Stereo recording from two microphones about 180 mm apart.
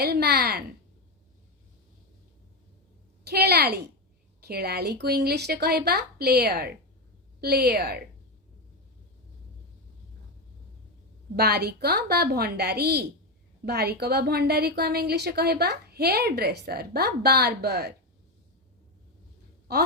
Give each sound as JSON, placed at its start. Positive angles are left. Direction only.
{"t": 0.0, "sound": "a woman's voice", "side_deg": -60}
{"t": 3.2, "sound": "a woman's voice", "side_deg": -65}
{"t": 11.3, "sound": "a woman's voice", "side_deg": -60}